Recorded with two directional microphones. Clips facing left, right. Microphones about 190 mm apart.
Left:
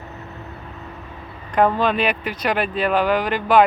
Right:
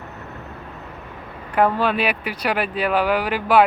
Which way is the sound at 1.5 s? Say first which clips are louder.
Left 1 dB; 5° right (ahead or behind).